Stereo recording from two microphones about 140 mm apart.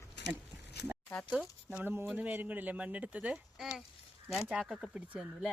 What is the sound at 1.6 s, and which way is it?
Speech, 15° right (ahead or behind).